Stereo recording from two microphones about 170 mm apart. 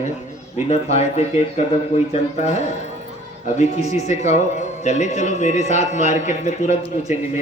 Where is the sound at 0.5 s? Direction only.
40° left (ahead or behind).